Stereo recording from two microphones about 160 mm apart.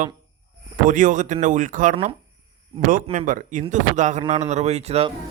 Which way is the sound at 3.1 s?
55° right (ahead or behind).